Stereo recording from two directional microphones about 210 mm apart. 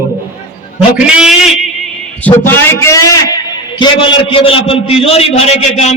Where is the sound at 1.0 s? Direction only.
5° right (ahead or behind).